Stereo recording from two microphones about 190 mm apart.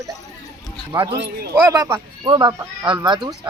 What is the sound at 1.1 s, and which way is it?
Speech, 60° right (ahead or behind).